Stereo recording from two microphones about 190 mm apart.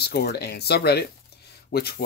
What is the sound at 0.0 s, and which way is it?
Speech, 60° left (ahead or behind).